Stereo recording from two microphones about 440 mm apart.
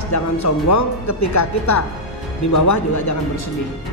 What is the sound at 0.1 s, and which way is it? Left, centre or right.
Speech, left.